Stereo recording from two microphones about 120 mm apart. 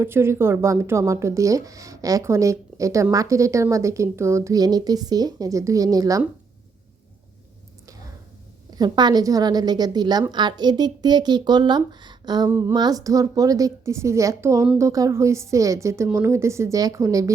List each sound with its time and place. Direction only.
0.0 s speech: 20° right (ahead or behind)
8.7 s speech: 35° right (ahead or behind)
12.5 s speech: 20° right (ahead or behind)
12.7 s speech: 35° right (ahead or behind)